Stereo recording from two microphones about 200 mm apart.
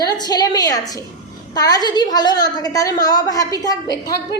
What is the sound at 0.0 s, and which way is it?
A woman's voice, 20° left (ahead or behind).